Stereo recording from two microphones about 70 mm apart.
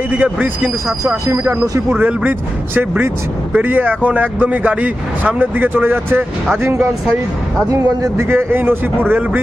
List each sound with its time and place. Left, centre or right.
0.1 s speech: right
1.0 s speech: right
1.6 s a man's voice: right
7.6 s speech: right
8.2 s a man's voice: right